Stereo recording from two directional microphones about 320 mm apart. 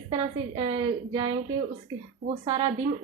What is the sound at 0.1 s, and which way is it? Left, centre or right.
A woman's voice, centre.